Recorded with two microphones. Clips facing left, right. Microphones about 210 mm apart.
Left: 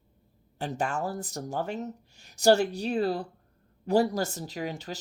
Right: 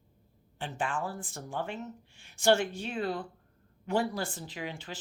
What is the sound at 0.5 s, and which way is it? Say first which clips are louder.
Speech: left 4 dB; 40° left (ahead or behind).